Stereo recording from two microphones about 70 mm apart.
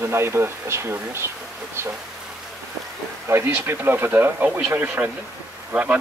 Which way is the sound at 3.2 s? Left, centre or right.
Right.